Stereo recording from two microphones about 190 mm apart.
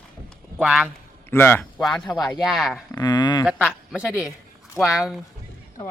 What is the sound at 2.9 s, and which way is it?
Speech, 20° left (ahead or behind).